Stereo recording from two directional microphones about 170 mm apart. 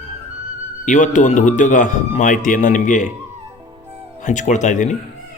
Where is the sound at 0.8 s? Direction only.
45° left (ahead or behind).